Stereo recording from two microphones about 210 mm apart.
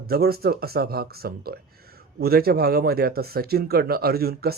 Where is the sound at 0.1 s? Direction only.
45° right (ahead or behind).